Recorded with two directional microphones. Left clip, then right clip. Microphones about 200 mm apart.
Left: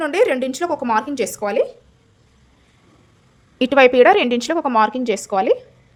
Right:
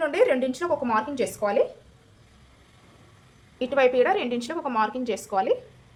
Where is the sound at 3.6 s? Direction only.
50° left (ahead or behind).